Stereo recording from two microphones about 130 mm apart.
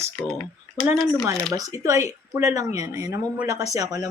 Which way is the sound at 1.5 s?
25° right (ahead or behind).